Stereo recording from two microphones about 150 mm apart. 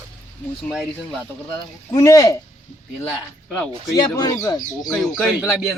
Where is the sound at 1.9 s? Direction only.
20° left (ahead or behind).